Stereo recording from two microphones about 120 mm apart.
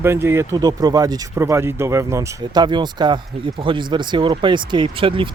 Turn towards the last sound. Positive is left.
turn(degrees=-45)  # may be behind; listen again after turning